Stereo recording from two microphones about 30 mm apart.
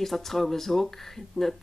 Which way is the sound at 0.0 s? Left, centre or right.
Centre.